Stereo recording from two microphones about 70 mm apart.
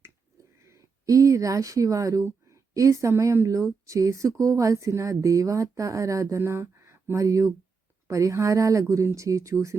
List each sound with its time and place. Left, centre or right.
0.7 s speech: right
7.3 s speech: right